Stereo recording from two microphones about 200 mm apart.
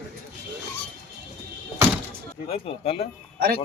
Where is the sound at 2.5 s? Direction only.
30° left (ahead or behind).